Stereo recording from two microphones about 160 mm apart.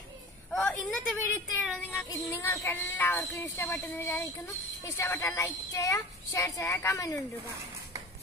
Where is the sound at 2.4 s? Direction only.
10° left (ahead or behind).